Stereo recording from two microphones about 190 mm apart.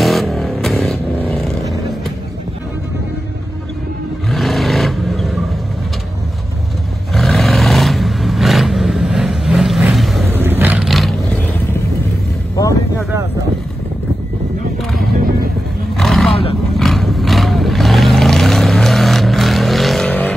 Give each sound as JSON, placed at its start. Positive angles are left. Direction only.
{"t": 0.0, "sound": "vehicle", "side_deg": 0}
{"t": 4.3, "sound": "vehicle", "side_deg": 0}
{"t": 7.2, "sound": "roar", "side_deg": 0}
{"t": 10.3, "sound": "vehicle", "side_deg": -10}
{"t": 15.0, "sound": "music", "side_deg": -50}
{"t": 16.0, "sound": "roaring cats", "side_deg": 0}
{"t": 16.7, "sound": "vehicle", "side_deg": 0}